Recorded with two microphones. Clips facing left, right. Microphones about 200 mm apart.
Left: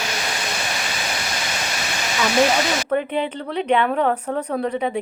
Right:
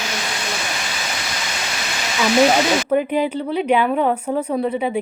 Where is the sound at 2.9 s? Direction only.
10° right (ahead or behind).